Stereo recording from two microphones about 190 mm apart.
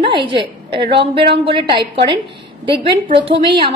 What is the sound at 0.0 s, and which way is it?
A woman's voice, 25° right (ahead or behind).